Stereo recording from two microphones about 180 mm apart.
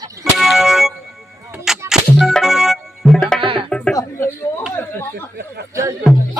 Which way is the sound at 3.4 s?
30° right (ahead or behind).